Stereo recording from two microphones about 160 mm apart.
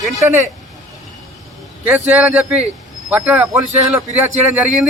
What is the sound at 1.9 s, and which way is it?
Speech, 10° right (ahead or behind).